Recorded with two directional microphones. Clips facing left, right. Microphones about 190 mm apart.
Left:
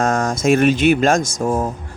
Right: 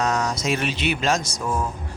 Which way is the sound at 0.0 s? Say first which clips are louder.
Left 6 dB; 50° left (ahead or behind).